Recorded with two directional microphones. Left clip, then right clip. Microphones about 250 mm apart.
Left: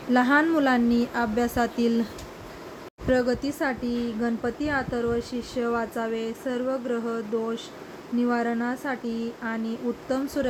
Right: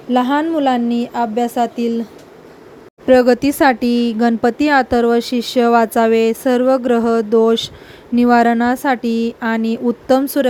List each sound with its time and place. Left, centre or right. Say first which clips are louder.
0.1 s speech: right 5 dB; centre
3.1 s speech: right 13 dB; right